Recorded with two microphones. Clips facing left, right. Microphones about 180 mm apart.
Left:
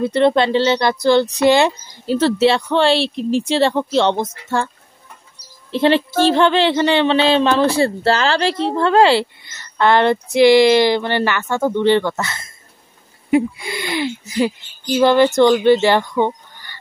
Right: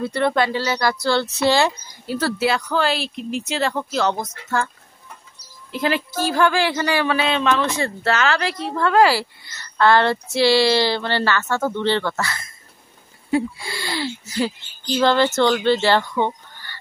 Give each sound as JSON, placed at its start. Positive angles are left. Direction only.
{"t": 0.0, "sound": "speech", "side_deg": 20}
{"t": 5.7, "sound": "speech", "side_deg": 30}